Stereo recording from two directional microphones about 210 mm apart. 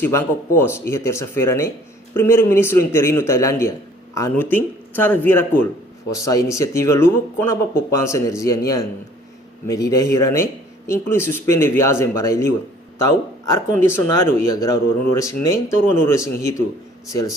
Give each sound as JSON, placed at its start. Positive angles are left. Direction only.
{"t": 0.0, "sound": "speech", "side_deg": 10}
{"t": 13.8, "sound": "speech", "side_deg": 10}